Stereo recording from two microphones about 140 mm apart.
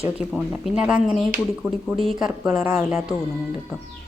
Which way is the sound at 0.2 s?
5° right (ahead or behind).